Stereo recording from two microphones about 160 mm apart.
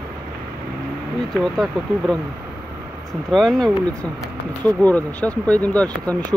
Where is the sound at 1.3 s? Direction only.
5° left (ahead or behind).